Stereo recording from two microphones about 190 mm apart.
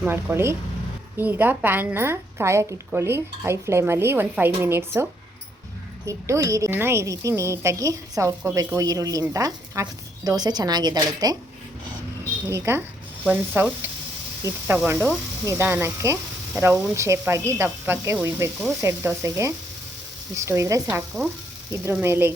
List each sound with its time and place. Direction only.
0.0 s a woman's voice: 10° right (ahead or behind)
6.1 s a woman's voice: 15° right (ahead or behind)
12.5 s a woman's voice: 15° right (ahead or behind)
14.7 s a woman's voice: 10° right (ahead or behind)
22.0 s a woman's voice: 10° right (ahead or behind)